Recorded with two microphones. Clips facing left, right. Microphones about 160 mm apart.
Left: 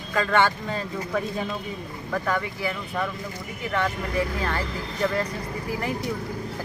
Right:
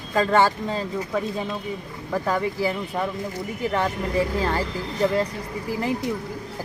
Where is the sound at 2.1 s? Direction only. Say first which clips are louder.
Right 3 dB; 30° right (ahead or behind).